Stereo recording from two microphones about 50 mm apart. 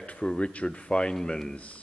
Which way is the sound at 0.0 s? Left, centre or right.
Left.